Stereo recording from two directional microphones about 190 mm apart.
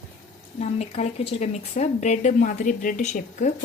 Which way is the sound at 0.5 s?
35° left (ahead or behind).